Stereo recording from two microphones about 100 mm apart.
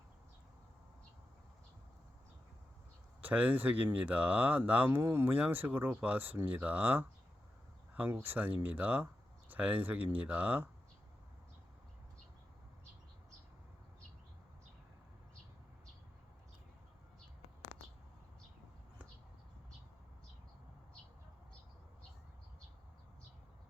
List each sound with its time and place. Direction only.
3.2 s speech: 15° right (ahead or behind)